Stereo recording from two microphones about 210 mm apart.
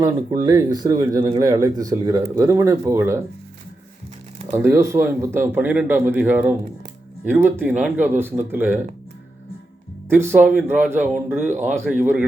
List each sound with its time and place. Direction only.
0.0 s speech: 15° right (ahead or behind)
4.5 s speech: 10° right (ahead or behind)
10.1 s speech: 10° right (ahead or behind)